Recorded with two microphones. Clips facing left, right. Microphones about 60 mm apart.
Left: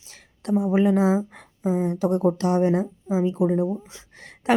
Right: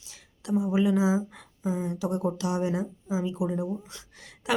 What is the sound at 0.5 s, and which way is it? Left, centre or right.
Speech, left.